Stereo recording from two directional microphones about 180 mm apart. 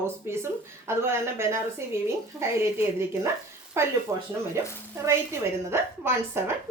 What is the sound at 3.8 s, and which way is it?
Speech, 15° right (ahead or behind).